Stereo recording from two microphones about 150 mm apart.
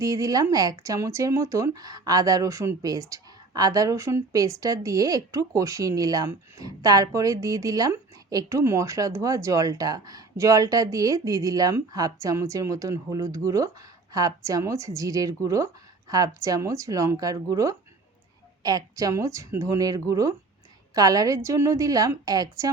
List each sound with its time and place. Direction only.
0.0 s speech: 20° right (ahead or behind)